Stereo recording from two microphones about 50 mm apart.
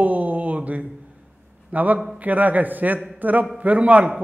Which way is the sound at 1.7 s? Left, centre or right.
Right.